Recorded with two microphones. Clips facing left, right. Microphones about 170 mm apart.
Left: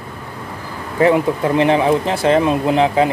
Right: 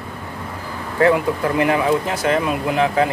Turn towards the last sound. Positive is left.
turn(degrees=20)  # may be behind; listen again after turning